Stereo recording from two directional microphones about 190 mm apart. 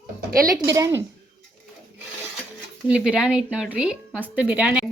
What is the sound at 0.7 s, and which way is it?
Speech, 15° right (ahead or behind).